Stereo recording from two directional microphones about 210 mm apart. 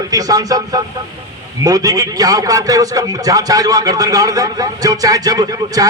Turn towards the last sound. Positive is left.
turn(degrees=-20)  # may be behind; listen again after turning